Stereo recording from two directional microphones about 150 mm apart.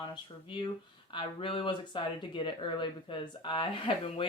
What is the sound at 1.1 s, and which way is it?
Speech, 35° left (ahead or behind).